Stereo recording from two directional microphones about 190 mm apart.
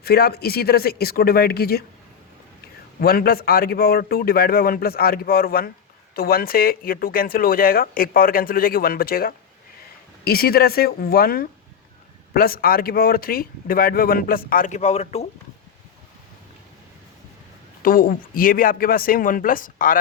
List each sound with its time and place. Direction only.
0.0 s speech: 55° left (ahead or behind)
3.0 s speech: 55° left (ahead or behind); by 15.3 s 35° left (ahead or behind)
17.8 s speech: 50° left (ahead or behind)